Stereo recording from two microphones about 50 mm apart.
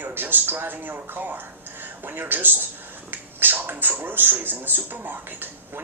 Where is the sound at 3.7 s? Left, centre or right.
Right.